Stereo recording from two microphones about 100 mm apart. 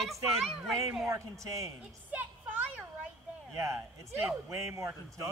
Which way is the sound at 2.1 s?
15° right (ahead or behind).